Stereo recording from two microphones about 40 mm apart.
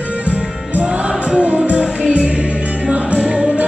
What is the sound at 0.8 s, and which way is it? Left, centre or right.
Music, right.